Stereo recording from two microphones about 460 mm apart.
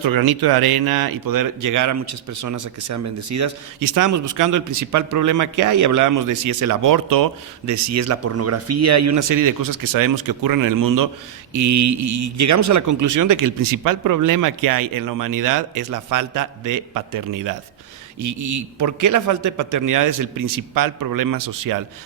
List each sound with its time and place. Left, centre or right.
0.0 s speech: right